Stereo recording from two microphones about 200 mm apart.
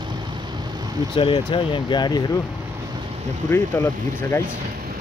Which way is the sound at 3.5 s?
10° left (ahead or behind).